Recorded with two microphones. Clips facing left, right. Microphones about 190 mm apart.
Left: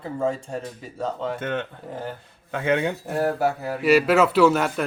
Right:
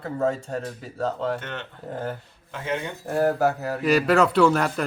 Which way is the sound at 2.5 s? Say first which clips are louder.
Left 7 dB; 65° left (ahead or behind).